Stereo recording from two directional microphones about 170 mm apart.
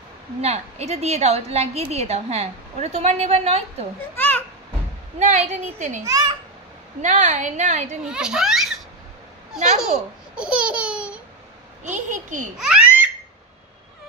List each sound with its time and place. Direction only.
0.4 s a woman's voice: 40° right (ahead or behind)
4.1 s babbling: 10° left (ahead or behind)
5.2 s a woman's voice: 45° right (ahead or behind)
6.0 s a child's voice: 20° right (ahead or behind)
7.0 s a woman's voice: 45° right (ahead or behind)
8.0 s a child's voice: 5° right (ahead or behind)
9.8 s baby laughter: 5° right (ahead or behind)
11.8 s a child's voice: 45° right (ahead or behind)
12.5 s babbling: 5° right (ahead or behind)